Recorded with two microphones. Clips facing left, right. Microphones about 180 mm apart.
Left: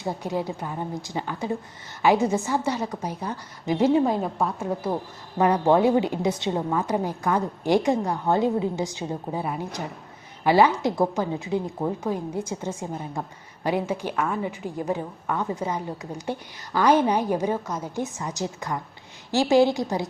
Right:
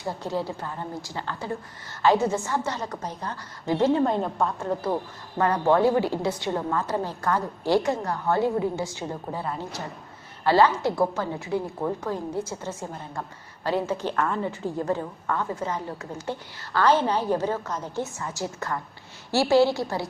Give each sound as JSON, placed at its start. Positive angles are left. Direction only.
{"t": 0.0, "sound": "a woman's voice", "side_deg": 15}